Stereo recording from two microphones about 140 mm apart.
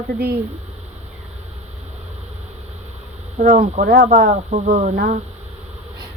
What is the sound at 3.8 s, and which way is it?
Speech, 90° right.